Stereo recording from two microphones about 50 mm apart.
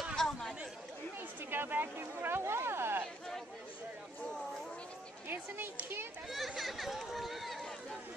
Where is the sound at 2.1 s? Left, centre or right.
Right.